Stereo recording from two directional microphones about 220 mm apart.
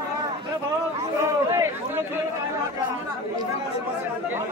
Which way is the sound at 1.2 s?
10° right (ahead or behind).